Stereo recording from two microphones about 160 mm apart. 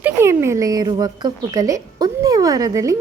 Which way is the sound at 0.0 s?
15° right (ahead or behind).